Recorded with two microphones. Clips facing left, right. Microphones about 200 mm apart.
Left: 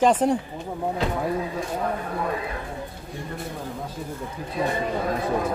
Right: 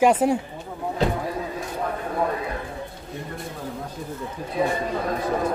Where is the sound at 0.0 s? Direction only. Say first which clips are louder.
Right 1 dB; 10° right (ahead or behind).